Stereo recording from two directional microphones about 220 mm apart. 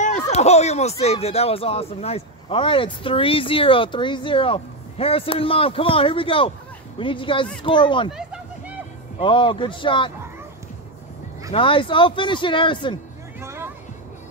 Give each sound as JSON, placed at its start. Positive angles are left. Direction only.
{"t": 0.0, "sound": "speech", "side_deg": 30}
{"t": 8.1, "sound": "a sound", "side_deg": -5}
{"t": 9.2, "sound": "speech", "side_deg": 20}
{"t": 11.5, "sound": "speech", "side_deg": 25}
{"t": 13.4, "sound": "music", "side_deg": -10}